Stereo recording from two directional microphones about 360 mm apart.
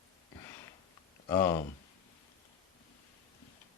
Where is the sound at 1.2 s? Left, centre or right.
Centre.